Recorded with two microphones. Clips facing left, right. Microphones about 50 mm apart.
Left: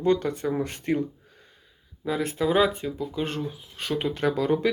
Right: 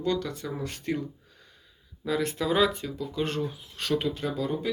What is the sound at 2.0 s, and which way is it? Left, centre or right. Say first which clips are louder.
Speech: left 2 dB; centre.